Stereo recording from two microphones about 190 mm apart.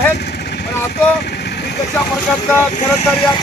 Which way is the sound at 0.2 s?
60° left (ahead or behind).